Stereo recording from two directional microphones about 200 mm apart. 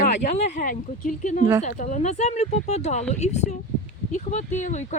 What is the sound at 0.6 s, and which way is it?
Speech, 40° left (ahead or behind).